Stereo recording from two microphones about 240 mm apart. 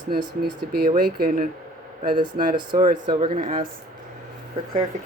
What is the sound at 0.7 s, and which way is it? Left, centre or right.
Speech, right.